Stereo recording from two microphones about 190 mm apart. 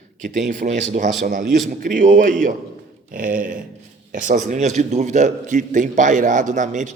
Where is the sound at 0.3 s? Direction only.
40° right (ahead or behind).